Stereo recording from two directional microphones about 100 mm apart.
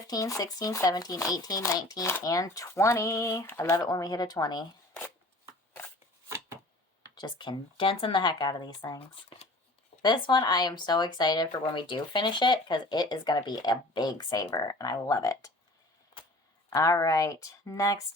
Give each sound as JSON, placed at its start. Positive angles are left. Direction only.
{"t": 0.1, "sound": "speech", "side_deg": 35}
{"t": 7.2, "sound": "speech", "side_deg": 45}
{"t": 9.3, "sound": "a sound", "side_deg": 70}
{"t": 10.0, "sound": "speech", "side_deg": 45}
{"t": 14.4, "sound": "speech", "side_deg": 30}
{"t": 16.6, "sound": "speech", "side_deg": 35}